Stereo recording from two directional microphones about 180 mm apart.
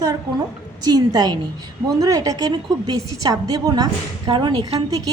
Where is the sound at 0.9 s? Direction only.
20° right (ahead or behind).